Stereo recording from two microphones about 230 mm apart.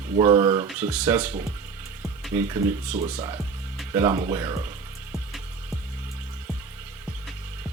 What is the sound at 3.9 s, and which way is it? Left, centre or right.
Speech, centre.